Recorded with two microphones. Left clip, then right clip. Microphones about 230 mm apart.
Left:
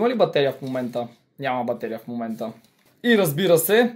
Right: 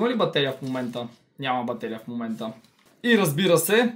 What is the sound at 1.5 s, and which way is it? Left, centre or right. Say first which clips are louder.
Speech: left 2 dB; right.